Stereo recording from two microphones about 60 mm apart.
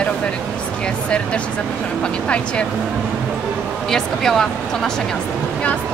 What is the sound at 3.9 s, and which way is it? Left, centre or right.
Speech, centre.